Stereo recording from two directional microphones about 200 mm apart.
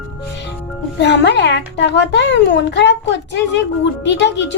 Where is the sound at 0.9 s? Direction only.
60° left (ahead or behind).